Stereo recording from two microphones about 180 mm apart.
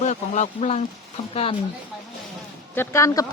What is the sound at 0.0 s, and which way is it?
Speech, 40° left (ahead or behind).